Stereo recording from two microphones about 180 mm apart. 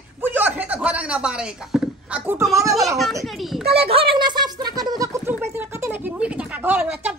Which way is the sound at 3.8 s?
35° right (ahead or behind).